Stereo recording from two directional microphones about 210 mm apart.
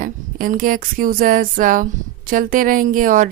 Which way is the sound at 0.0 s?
40° right (ahead or behind).